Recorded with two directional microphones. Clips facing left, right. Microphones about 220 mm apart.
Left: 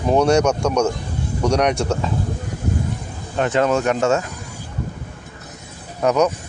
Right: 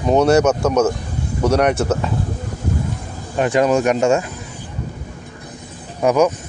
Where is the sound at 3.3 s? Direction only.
10° right (ahead or behind).